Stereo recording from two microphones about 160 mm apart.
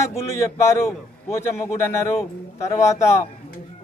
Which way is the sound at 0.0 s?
20° left (ahead or behind).